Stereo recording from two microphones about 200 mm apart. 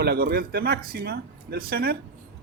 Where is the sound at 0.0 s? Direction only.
50° right (ahead or behind).